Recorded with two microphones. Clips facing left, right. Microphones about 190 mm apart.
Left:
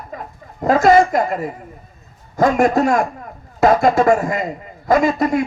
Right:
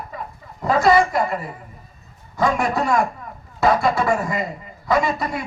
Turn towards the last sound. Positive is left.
turn(degrees=45)  # may be behind; listen again after turning